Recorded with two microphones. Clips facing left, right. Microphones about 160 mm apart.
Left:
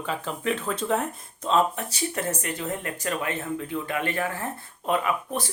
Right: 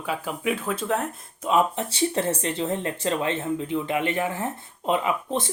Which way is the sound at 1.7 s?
25° right (ahead or behind).